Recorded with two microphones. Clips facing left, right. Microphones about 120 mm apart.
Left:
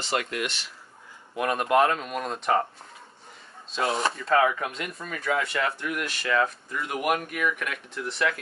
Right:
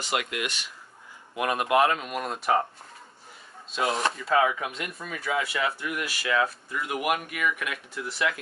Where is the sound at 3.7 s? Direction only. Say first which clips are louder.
Even; centre (ahead or behind).